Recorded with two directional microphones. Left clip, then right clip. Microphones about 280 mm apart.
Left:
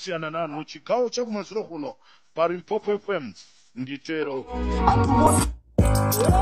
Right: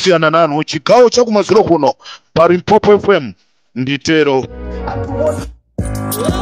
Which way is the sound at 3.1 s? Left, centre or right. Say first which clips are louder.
Right 16 dB; right.